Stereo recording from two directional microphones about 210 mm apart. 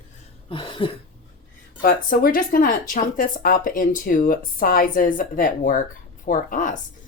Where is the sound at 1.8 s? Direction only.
45° left (ahead or behind).